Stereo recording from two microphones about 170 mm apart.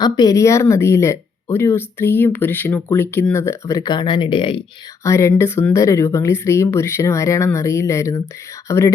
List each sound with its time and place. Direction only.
0.0 s speech: 20° left (ahead or behind)
5.0 s speech: 15° left (ahead or behind)